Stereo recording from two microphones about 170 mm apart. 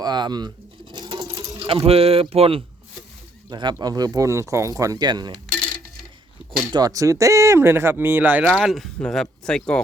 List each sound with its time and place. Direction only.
0.0 s sewing machine: 25° right (ahead or behind)
1.5 s speech: 30° right (ahead or behind)
6.7 s speech: 20° right (ahead or behind)
8.5 s speech: centre (ahead or behind)